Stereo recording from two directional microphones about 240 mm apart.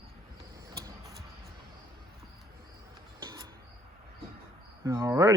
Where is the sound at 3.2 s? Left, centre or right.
Centre.